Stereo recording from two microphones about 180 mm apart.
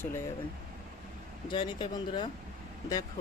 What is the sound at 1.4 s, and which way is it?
Speech, 25° left (ahead or behind).